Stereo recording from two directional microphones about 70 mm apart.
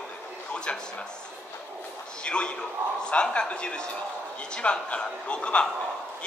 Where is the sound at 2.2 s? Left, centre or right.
Centre.